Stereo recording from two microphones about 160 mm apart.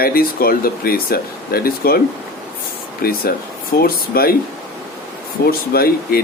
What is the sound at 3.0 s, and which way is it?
Speech, 70° left (ahead or behind).